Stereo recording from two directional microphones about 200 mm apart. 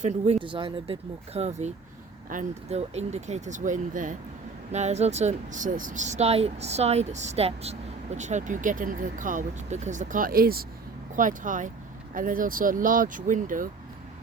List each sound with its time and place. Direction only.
0.0 s speech: 30° right (ahead or behind)